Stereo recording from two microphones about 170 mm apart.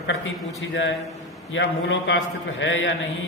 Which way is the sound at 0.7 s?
90° left.